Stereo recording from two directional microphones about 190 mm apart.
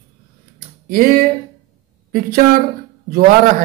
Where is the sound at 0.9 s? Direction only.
50° right (ahead or behind).